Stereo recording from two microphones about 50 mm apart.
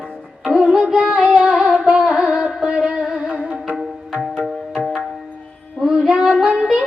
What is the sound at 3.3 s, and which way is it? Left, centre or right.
Music, right.